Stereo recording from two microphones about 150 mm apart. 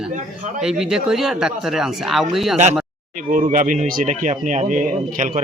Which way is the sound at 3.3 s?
60° right (ahead or behind).